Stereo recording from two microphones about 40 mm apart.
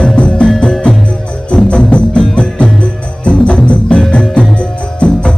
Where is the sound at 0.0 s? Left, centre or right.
Left.